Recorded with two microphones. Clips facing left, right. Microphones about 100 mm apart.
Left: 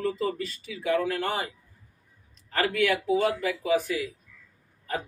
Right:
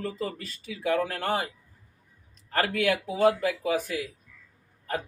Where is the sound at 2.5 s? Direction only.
45° right (ahead or behind).